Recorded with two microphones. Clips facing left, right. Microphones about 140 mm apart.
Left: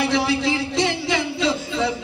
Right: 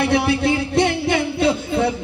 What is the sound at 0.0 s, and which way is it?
Music, 55° right (ahead or behind).